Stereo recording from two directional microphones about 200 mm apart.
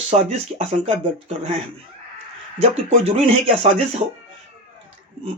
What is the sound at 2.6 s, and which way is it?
Speech, 30° right (ahead or behind).